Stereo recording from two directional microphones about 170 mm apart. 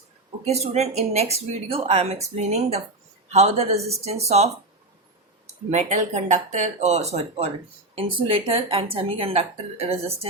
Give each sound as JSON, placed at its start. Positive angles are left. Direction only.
{"t": 0.4, "sound": "speech", "side_deg": -40}
{"t": 5.7, "sound": "speech", "side_deg": -45}